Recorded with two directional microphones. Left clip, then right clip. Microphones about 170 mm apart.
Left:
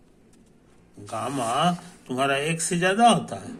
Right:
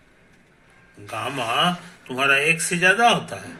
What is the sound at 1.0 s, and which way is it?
Speech, 25° left (ahead or behind).